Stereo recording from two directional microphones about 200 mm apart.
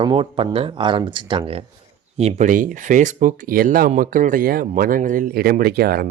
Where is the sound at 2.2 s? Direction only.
35° right (ahead or behind).